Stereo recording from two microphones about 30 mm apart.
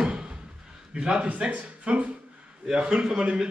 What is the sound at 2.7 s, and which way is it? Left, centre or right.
Speech, right.